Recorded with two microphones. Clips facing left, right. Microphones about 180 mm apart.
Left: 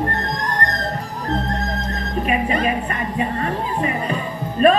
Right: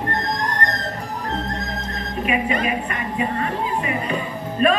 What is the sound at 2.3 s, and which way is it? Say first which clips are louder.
A woman's voice: left 1 dB; 40° left (ahead or behind).